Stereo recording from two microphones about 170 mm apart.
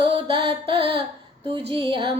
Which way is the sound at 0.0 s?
30° right (ahead or behind).